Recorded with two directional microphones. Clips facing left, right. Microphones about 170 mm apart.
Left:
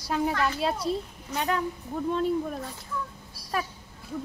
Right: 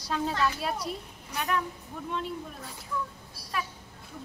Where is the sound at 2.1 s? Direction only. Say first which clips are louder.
Left 9 dB; 40° left (ahead or behind).